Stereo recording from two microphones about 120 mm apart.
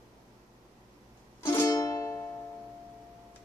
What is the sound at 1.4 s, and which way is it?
Music, 25° left (ahead or behind).